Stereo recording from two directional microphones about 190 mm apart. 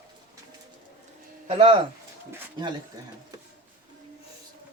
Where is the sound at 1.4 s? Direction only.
30° right (ahead or behind).